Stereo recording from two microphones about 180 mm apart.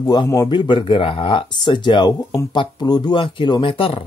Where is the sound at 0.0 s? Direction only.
20° left (ahead or behind).